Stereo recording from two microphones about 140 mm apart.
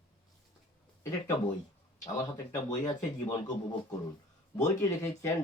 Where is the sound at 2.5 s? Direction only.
25° left (ahead or behind).